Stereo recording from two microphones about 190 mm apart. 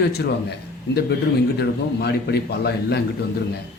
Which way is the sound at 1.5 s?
60° left (ahead or behind).